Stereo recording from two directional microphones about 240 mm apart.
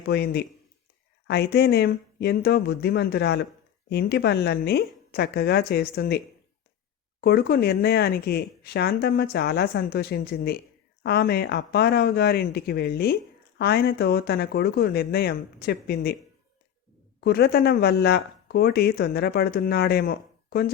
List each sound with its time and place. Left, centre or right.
0.1 s speech: left
17.2 s speech: left